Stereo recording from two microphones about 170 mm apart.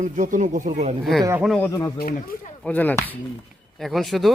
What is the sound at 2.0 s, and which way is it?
Speech, 60° left (ahead or behind).